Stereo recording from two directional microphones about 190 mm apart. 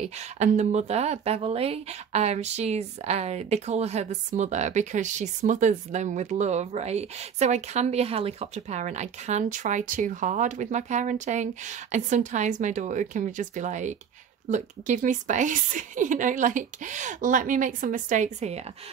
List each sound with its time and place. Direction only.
0.4 s a woman's voice: 35° right (ahead or behind)